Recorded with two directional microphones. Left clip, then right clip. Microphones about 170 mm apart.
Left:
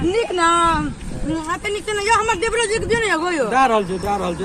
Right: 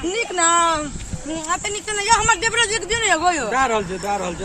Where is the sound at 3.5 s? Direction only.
20° left (ahead or behind).